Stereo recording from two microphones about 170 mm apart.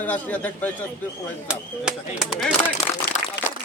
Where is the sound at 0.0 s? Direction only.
10° left (ahead or behind).